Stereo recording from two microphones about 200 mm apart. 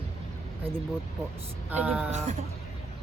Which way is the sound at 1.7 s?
10° right (ahead or behind).